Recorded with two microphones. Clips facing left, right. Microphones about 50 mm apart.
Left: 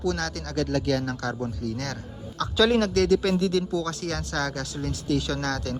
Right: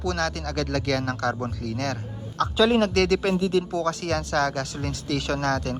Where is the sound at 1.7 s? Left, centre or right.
Right.